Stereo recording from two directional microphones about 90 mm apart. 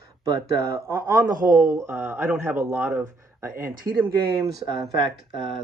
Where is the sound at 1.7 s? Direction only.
25° right (ahead or behind).